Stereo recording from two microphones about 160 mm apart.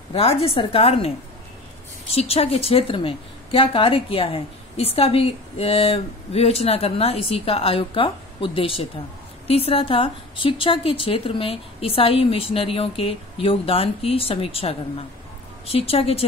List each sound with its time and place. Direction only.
0.1 s a woman's voice: 35° left (ahead or behind)